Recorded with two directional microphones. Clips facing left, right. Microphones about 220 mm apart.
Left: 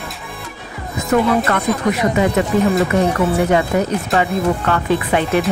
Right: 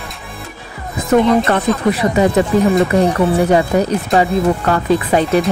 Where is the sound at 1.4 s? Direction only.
30° right (ahead or behind).